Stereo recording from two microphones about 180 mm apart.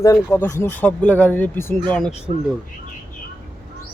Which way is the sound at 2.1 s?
35° left (ahead or behind).